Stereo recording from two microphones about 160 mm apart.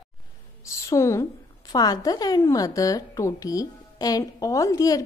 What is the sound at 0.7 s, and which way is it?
A woman's voice, 20° left (ahead or behind).